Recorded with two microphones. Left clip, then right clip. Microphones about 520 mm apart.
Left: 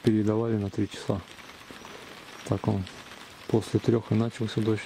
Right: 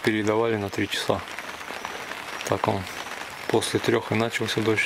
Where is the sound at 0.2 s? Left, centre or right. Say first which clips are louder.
Right 5 dB; centre.